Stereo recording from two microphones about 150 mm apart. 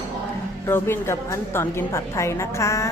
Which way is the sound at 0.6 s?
15° left (ahead or behind).